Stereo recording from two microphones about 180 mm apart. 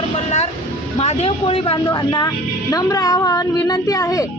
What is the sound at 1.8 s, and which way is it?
Speech, 20° left (ahead or behind).